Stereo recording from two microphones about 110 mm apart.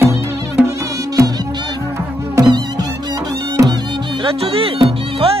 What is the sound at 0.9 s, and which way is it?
Music, 30° right (ahead or behind).